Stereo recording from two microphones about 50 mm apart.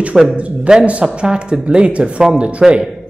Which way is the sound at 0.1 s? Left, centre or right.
Centre.